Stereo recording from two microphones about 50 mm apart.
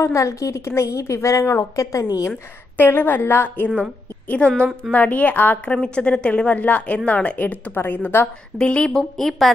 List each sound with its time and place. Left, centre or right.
0.0 s a woman's voice: left
2.8 s a woman's voice: left
4.4 s a woman's voice: left
5.7 s a woman's voice: centre; by 8.3 s left
8.5 s a woman's voice: left
8.9 s a woman's voice: centre